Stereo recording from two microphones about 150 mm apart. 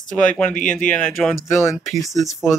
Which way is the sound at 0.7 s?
5° left (ahead or behind).